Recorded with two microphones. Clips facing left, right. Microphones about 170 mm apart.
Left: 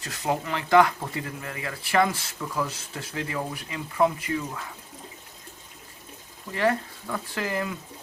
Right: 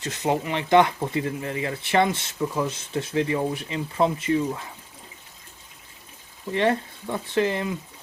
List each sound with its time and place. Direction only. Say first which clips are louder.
0.0 s speech: right 3 dB; 20° right (ahead or behind)
6.5 s speech: right 2 dB; 25° right (ahead or behind)